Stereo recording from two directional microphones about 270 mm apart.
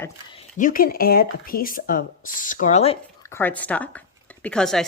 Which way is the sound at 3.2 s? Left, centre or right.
Centre.